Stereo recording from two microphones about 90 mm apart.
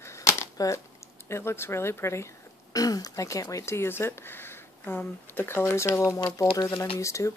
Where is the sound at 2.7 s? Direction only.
45° left (ahead or behind).